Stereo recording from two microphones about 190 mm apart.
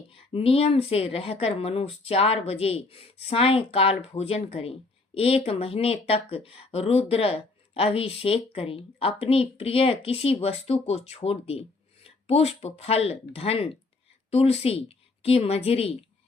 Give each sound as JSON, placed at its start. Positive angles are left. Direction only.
{"t": 0.1, "sound": "a woman's voice", "side_deg": 30}